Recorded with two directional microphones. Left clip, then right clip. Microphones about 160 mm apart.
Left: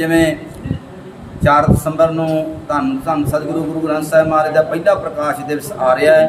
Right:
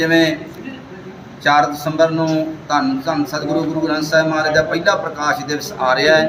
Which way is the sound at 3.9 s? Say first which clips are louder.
Left 4 dB; 25° left (ahead or behind).